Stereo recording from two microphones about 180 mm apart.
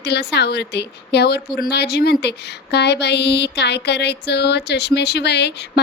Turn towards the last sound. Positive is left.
turn(degrees=70)  # may be behind; listen again after turning